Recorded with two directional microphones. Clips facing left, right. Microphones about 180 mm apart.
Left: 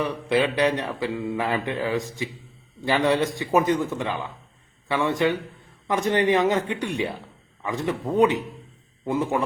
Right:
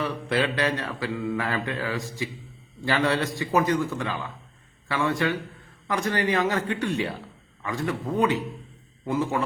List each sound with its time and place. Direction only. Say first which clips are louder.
0.0 s mantra: left 3 dB; 15° left (ahead or behind)